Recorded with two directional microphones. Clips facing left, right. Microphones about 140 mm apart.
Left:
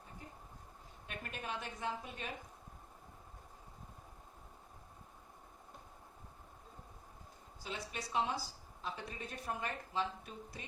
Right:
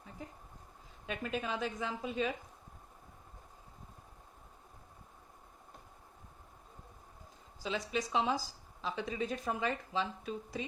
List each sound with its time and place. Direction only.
1.1 s speech: 90° right
7.6 s speech: 90° right